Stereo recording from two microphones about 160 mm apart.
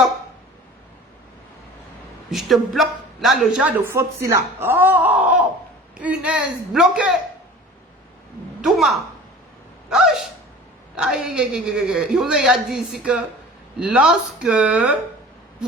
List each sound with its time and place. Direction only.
2.3 s a woman's voice: centre (ahead or behind)
4.2 s speech: 15° right (ahead or behind)
8.6 s a woman's voice: centre (ahead or behind)